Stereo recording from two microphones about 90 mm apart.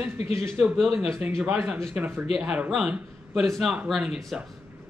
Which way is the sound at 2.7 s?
5° right (ahead or behind).